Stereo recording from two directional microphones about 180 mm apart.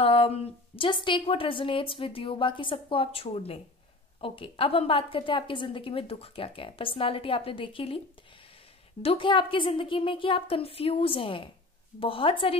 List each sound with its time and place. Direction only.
0.0 s a woman's voice: 30° left (ahead or behind)
9.0 s a woman's voice: 30° left (ahead or behind)